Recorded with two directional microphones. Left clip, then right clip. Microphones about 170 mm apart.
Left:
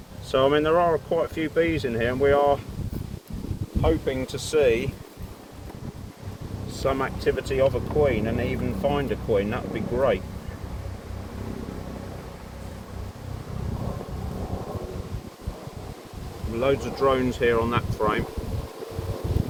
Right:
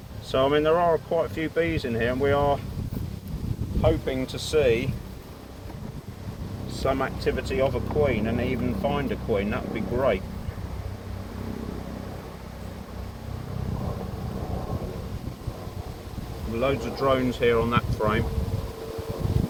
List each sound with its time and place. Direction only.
0.3 s speech: 80° left
3.8 s speech: 90° left
6.7 s speech: 80° left
16.6 s speech: 90° left